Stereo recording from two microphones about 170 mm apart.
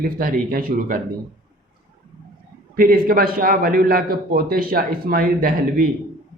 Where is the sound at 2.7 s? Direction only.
60° right (ahead or behind).